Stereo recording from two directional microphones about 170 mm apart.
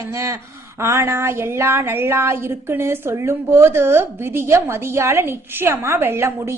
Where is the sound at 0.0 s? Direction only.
15° right (ahead or behind).